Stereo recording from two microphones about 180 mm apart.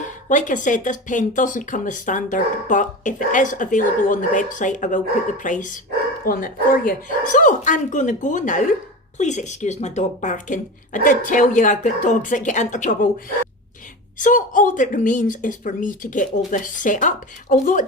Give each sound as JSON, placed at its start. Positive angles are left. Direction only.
{"t": 0.3, "sound": "speech", "side_deg": 45}
{"t": 14.2, "sound": "speech", "side_deg": 45}